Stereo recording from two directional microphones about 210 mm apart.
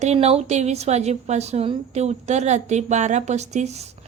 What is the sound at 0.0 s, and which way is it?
A woman's voice, 30° right (ahead or behind).